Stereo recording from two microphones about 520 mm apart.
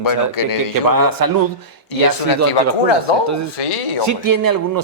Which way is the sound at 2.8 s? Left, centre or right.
Left.